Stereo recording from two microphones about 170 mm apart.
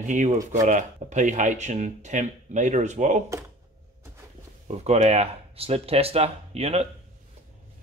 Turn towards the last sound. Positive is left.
turn(degrees=-40)  # may be behind; listen again after turning